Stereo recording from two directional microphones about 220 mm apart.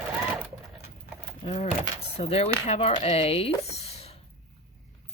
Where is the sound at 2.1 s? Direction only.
25° left (ahead or behind).